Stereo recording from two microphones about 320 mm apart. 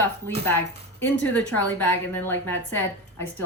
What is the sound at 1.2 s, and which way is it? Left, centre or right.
A woman's voice, centre.